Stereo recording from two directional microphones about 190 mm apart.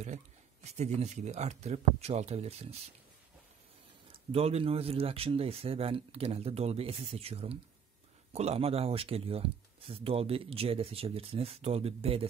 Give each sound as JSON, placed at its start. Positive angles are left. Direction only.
{"t": 0.7, "sound": "speech", "side_deg": -35}
{"t": 4.1, "sound": "speech", "side_deg": -30}